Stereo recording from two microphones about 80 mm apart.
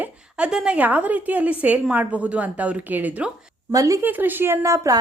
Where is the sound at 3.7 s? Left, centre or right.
Right.